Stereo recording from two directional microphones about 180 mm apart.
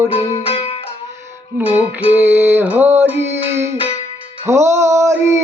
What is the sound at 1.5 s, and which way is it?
Music, 10° right (ahead or behind).